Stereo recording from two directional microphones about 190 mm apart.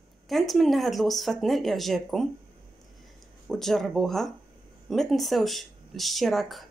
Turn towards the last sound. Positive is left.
turn(degrees=0)  # may be behind; listen again after turning